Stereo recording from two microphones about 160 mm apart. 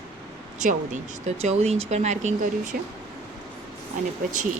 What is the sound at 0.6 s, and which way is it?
Speech, 50° right (ahead or behind).